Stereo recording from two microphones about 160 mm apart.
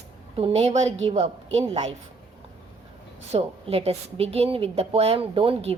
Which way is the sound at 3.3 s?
40° right (ahead or behind).